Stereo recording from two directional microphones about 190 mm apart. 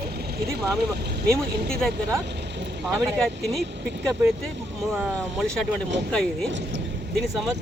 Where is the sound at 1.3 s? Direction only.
5° left (ahead or behind).